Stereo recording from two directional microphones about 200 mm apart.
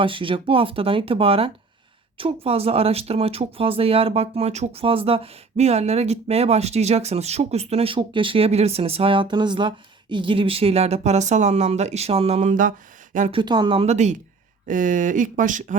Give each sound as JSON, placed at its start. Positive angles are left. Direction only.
{"t": 0.0, "sound": "speech", "side_deg": -25}
{"t": 13.4, "sound": "speech", "side_deg": -20}